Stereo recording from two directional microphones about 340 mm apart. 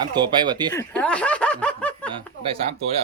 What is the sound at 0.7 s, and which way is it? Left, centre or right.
Speech, centre.